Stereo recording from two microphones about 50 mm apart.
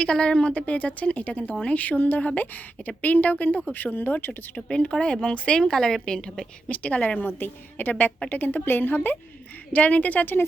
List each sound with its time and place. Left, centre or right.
0.0 s a woman's voice: centre; by 4.3 s left
4.3 s a woman's voice: left
6.7 s a woman's voice: left
7.2 s a woman's voice: left
9.7 s a woman's voice: left